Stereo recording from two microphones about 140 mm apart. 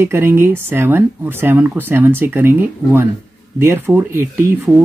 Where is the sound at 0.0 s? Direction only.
15° right (ahead or behind).